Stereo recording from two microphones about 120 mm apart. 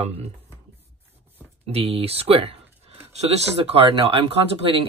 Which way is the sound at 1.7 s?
55° right (ahead or behind).